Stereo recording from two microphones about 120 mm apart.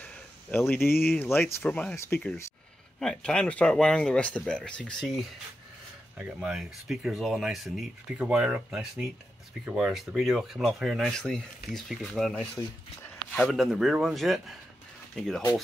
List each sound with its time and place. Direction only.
0.0 s a sound: 15° left (ahead or behind)
1.2 s speech: 20° left (ahead or behind)
1.6 s speech: 10° left (ahead or behind)
3.0 s speech: 5° left (ahead or behind)
6.1 s speech: 10° right (ahead or behind)